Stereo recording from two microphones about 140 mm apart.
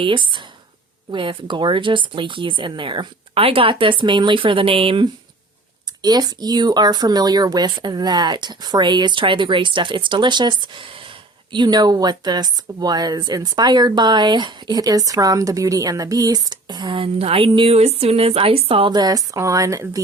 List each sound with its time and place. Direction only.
0.0 s speech: 35° right (ahead or behind)
6.0 s speech: 30° right (ahead or behind)